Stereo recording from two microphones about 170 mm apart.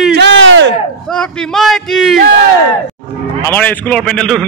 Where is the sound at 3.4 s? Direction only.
10° left (ahead or behind).